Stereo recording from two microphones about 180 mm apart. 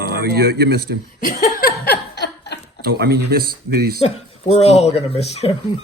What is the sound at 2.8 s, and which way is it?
Speech, 60° right (ahead or behind).